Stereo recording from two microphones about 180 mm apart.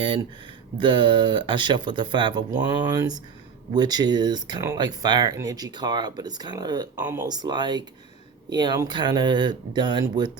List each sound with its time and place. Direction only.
0.8 s speech: 25° right (ahead or behind)